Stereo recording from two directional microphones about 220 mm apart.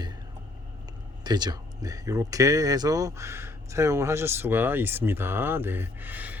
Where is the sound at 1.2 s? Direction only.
20° right (ahead or behind).